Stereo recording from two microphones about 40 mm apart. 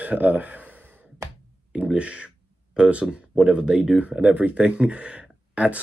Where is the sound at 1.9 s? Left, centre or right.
Right.